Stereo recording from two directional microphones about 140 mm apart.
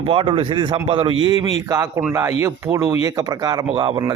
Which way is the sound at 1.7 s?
25° right (ahead or behind).